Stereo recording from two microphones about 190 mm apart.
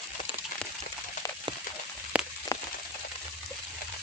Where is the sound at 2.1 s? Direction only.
5° right (ahead or behind).